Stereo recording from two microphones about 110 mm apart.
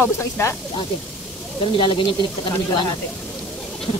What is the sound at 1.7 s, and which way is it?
Speech, 50° left (ahead or behind).